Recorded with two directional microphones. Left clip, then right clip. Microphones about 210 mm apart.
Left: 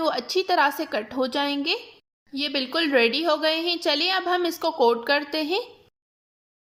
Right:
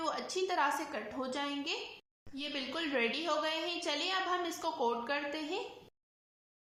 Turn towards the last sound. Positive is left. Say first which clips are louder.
# left 13 dB
turn(degrees=45)  # may be behind; listen again after turning